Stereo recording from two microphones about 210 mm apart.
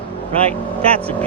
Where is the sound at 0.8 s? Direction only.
25° right (ahead or behind).